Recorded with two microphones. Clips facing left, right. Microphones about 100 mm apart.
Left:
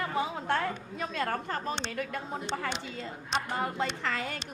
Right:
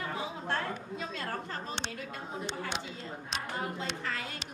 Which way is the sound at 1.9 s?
60° left (ahead or behind).